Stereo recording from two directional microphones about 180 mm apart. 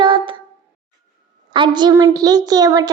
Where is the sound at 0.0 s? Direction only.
30° right (ahead or behind).